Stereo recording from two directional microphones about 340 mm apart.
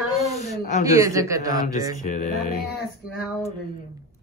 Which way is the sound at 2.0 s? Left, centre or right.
Left.